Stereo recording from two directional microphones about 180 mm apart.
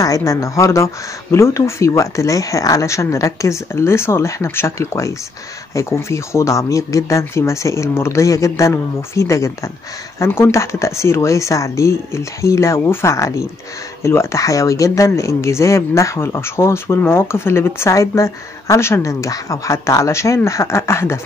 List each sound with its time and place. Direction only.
0.0 s speech: 20° left (ahead or behind)